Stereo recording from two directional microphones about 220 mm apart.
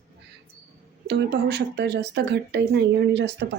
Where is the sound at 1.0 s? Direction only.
50° right (ahead or behind).